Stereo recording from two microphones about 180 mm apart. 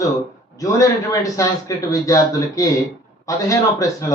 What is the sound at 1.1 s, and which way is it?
Speech, 20° left (ahead or behind).